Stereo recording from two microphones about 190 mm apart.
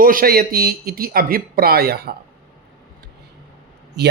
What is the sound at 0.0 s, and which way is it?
Speech, 50° right (ahead or behind).